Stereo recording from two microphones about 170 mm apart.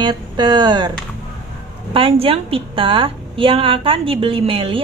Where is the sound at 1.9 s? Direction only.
35° right (ahead or behind).